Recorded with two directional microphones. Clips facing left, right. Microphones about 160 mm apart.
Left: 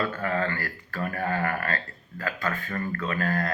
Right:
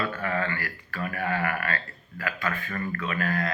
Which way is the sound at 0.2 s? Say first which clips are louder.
Left 1 dB; 30° left (ahead or behind).